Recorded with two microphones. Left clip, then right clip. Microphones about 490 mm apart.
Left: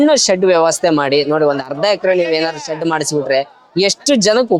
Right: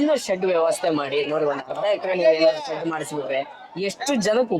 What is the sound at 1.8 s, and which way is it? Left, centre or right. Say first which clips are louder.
Speech: left 5 dB; left.